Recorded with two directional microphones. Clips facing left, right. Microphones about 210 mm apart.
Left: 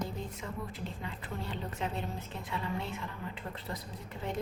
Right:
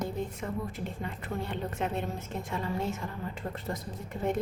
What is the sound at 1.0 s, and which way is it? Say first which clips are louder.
A woman's voice: right 5 dB; 55° right (ahead or behind).